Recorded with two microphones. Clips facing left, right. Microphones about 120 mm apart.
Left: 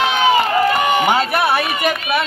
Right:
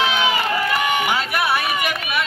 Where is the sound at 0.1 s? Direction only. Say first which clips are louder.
Left 6 dB; 40° left (ahead or behind).